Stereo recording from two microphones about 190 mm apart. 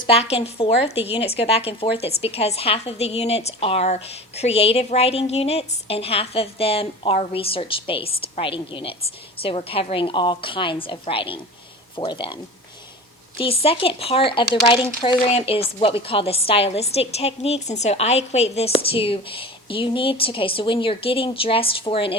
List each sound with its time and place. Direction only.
0.0 s a woman's voice: 30° left (ahead or behind)